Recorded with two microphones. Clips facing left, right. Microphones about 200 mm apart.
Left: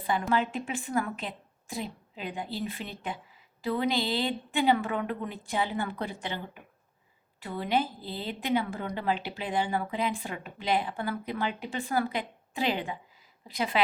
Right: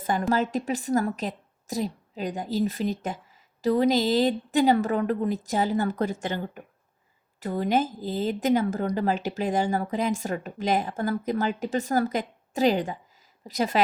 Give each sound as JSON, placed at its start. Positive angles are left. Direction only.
{"t": 0.0, "sound": "a woman's voice", "side_deg": -45}